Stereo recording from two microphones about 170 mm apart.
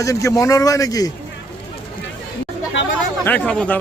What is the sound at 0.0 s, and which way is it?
A man's voice, 20° left (ahead or behind).